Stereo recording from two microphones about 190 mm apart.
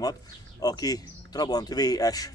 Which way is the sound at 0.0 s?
20° left (ahead or behind).